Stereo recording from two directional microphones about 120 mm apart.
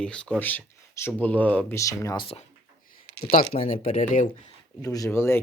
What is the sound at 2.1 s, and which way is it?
Speech, 50° left (ahead or behind).